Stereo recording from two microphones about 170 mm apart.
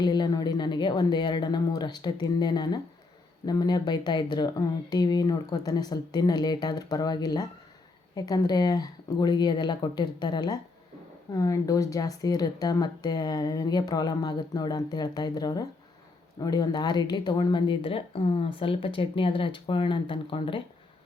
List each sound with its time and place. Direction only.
0.0 s speech: 25° left (ahead or behind)